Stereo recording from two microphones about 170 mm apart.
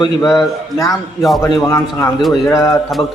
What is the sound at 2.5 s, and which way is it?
Speech, 20° left (ahead or behind).